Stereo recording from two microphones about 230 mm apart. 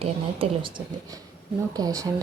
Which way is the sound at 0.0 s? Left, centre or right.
Right.